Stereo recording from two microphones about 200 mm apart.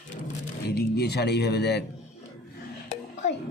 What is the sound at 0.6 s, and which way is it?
Speech, 55° left (ahead or behind).